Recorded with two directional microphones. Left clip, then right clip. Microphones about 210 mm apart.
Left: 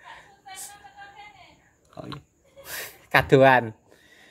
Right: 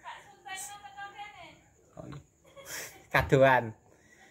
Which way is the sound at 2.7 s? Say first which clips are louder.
Left 8 dB; 30° left (ahead or behind).